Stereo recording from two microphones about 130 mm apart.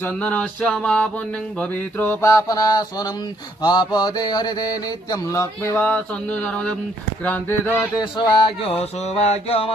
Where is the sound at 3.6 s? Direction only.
30° left (ahead or behind).